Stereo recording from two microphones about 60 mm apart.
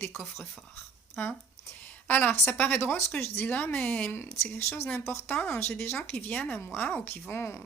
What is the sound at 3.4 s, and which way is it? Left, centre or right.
Speech, left.